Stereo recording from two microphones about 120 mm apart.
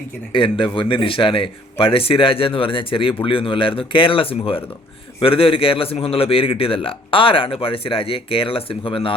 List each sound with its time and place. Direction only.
0.3 s a man's voice: 45° left (ahead or behind)